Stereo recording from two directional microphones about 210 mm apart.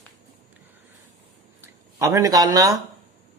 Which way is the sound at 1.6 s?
15° right (ahead or behind).